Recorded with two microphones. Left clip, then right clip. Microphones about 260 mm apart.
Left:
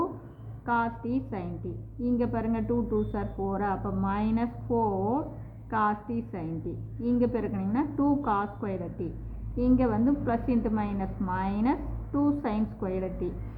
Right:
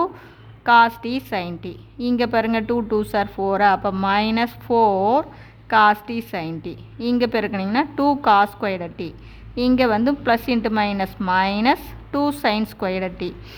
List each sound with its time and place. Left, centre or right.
0.6 s a woman's voice: right